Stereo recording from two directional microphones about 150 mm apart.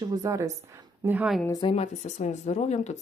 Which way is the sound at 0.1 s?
20° right (ahead or behind).